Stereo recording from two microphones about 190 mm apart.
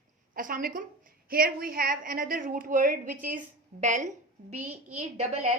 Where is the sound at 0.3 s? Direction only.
45° right (ahead or behind).